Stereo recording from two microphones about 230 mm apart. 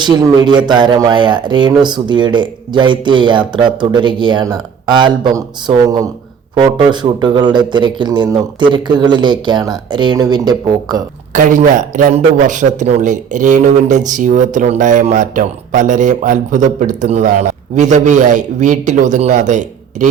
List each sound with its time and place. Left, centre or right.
0.0 s speech: centre
11.3 s a man's voice: right